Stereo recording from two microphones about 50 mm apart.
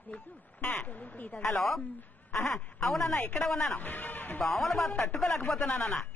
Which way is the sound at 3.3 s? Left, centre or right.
Centre.